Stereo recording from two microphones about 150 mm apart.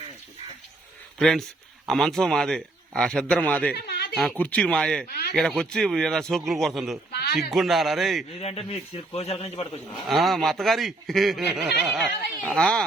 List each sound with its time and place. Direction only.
1.2 s a man's voice: centre (ahead or behind)
3.8 s a sound: 90° left
4.1 s a man's voice: centre (ahead or behind)
5.0 s a sound: 90° left
5.4 s a man's voice: 5° left (ahead or behind)
7.1 s a sound: 90° left
7.5 s a man's voice: centre (ahead or behind)
8.4 s a man's voice: 40° left (ahead or behind)
10.1 s a man's voice: centre (ahead or behind)